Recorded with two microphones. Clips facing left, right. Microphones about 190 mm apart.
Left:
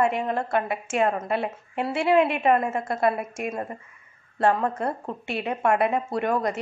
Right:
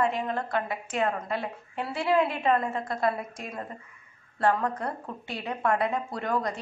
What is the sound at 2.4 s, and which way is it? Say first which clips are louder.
Speech: left 4 dB; 25° left (ahead or behind).